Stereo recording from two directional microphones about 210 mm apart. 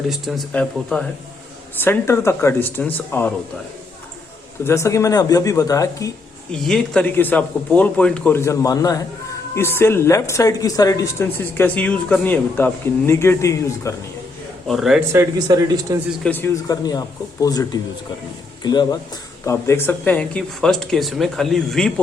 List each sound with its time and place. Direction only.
0.1 s speech: centre (ahead or behind)
4.6 s speech: 15° left (ahead or behind)
6.5 s speech: 5° left (ahead or behind)
14.7 s speech: centre (ahead or behind)
15.1 s speech: 15° right (ahead or behind)
16.2 s speech: 10° left (ahead or behind)